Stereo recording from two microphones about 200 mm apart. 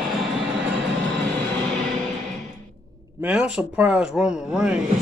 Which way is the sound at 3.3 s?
5° right (ahead or behind).